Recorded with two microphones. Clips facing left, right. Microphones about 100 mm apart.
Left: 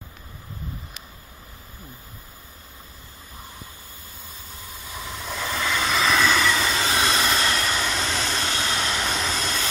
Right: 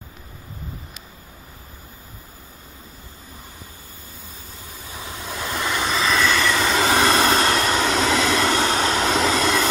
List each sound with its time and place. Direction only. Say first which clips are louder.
5.2 s train: right 1 dB; 5° right (ahead or behind)
6.7 s vehicle: right 6 dB; 65° right (ahead or behind); by 7.8 s 45° right (ahead or behind)
7.8 s vehicle: right 7 dB; 90° right; by 8.7 s 60° right (ahead or behind)
8.7 s vehicle: right 6 dB; 50° right (ahead or behind)
9.0 s vehicle: right 8 dB; 90° right